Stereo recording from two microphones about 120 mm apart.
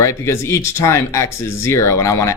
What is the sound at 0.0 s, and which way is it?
Speech, 25° left (ahead or behind).